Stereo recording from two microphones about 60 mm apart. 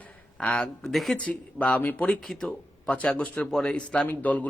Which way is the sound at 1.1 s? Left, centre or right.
Left.